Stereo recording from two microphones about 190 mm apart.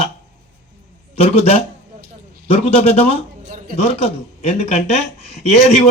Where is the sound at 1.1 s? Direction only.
35° left (ahead or behind).